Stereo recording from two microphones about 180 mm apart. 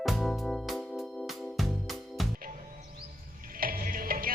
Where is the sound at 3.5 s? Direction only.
50° right (ahead or behind).